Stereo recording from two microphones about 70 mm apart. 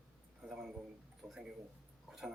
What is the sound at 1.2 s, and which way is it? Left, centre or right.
Speech, centre.